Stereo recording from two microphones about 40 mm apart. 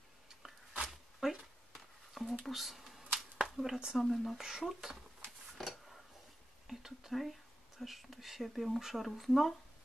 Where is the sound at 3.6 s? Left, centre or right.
Centre.